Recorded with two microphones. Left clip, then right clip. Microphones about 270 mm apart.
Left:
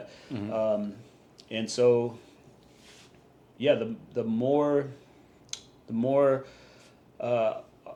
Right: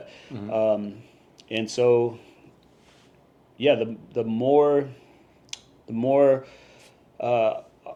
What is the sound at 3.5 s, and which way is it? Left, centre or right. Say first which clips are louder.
Speech: right 4 dB; right.